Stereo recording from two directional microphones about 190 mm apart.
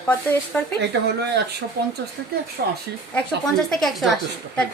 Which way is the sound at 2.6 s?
50° right (ahead or behind).